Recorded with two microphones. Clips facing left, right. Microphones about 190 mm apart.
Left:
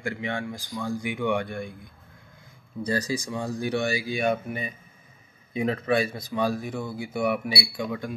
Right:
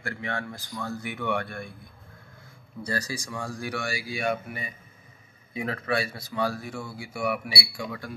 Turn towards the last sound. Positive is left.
turn(degrees=20)  # may be behind; listen again after turning